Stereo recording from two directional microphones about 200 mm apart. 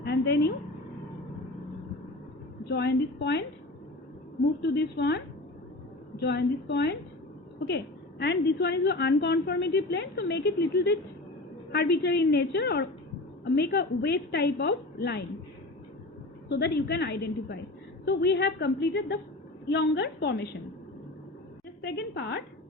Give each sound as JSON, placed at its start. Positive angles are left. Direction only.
{"t": 0.0, "sound": "a sound", "side_deg": 55}
{"t": 2.6, "sound": "a woman's voice", "side_deg": 55}
{"t": 4.6, "sound": "a woman's voice", "side_deg": 55}
{"t": 8.2, "sound": "a woman's voice", "side_deg": 55}
{"t": 16.5, "sound": "a woman's voice", "side_deg": 55}
{"t": 21.8, "sound": "a woman's voice", "side_deg": 60}